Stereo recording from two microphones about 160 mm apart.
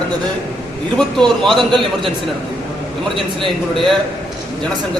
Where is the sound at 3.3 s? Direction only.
30° right (ahead or behind).